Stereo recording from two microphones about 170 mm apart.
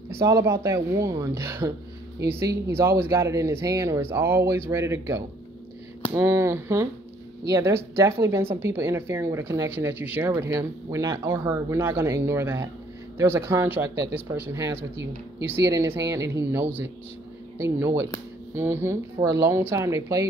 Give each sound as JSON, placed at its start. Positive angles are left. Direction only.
{"t": 0.1, "sound": "speech", "side_deg": -15}